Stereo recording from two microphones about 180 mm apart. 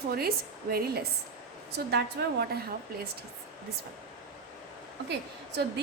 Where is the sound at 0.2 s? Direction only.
60° right (ahead or behind).